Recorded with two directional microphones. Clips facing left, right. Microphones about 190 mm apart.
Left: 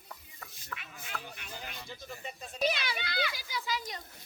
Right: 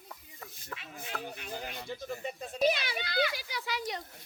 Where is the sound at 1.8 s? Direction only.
55° right (ahead or behind).